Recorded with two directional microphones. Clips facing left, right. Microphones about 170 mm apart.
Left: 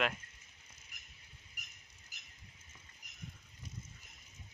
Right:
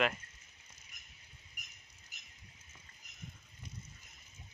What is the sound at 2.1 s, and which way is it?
Rodents, 90° left.